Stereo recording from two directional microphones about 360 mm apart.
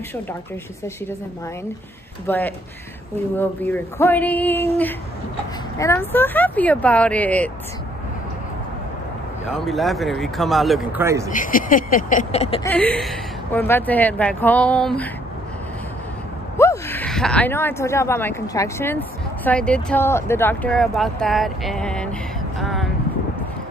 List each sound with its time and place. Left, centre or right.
2.2 s a woman's voice: centre
9.5 s a woman's voice: centre
11.3 s speech: left
12.7 s a woman's voice: centre
16.5 s speech: centre
22.6 s vehicle: centre